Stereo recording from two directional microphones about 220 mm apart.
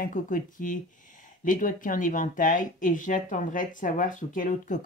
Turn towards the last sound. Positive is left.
turn(degrees=35)  # may be behind; listen again after turning